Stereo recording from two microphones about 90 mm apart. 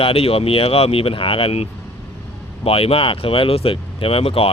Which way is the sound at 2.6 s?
90° left.